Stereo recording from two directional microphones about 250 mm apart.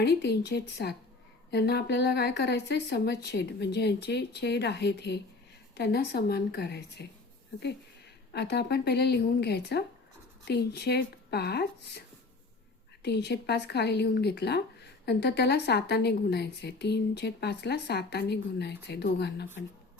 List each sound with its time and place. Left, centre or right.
0.0 s speech: left
8.3 s speech: left